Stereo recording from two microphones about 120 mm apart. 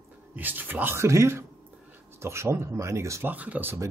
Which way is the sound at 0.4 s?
15° right (ahead or behind).